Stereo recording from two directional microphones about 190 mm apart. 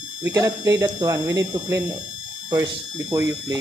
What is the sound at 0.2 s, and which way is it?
Speech, 15° right (ahead or behind).